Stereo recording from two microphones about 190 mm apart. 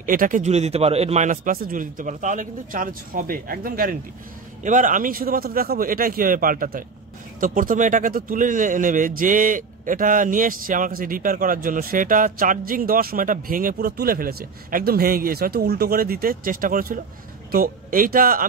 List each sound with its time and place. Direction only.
0.0 s a man's voice: 45° right (ahead or behind)